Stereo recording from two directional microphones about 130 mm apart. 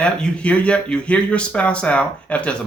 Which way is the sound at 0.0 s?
5° left (ahead or behind).